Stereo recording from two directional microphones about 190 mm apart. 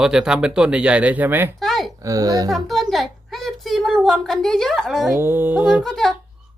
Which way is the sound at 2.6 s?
Centre (ahead or behind).